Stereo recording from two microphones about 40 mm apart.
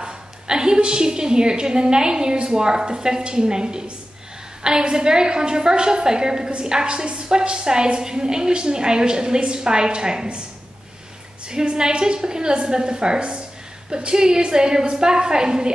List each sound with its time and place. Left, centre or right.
0.0 s a woman's voice: centre
11.4 s a woman's voice: right